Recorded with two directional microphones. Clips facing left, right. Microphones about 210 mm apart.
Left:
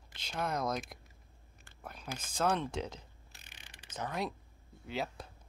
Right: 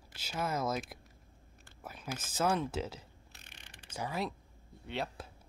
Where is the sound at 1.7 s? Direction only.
5° right (ahead or behind).